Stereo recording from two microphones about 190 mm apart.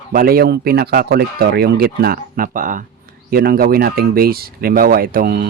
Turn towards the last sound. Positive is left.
turn(degrees=-50)  # may be behind; listen again after turning